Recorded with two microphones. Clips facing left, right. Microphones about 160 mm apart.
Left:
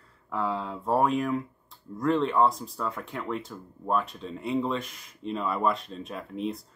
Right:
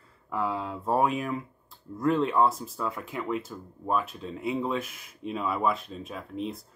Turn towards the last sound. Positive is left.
turn(degrees=0)  # may be behind; listen again after turning